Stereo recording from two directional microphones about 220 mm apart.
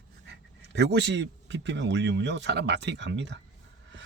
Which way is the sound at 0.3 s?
50° right (ahead or behind).